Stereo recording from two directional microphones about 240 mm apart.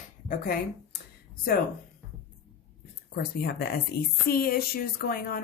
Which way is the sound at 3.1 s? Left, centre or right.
Left.